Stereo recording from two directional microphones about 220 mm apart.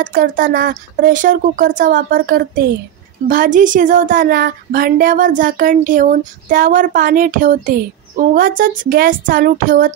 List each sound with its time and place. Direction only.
0.0 s speech: 40° right (ahead or behind)